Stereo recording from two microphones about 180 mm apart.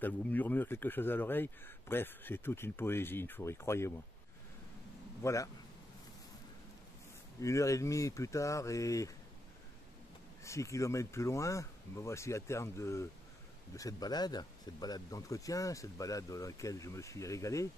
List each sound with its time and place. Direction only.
0.0 s speech: 10° left (ahead or behind)
5.2 s speech: 15° left (ahead or behind)
7.3 s speech: 15° left (ahead or behind)
10.4 s speech: 15° left (ahead or behind)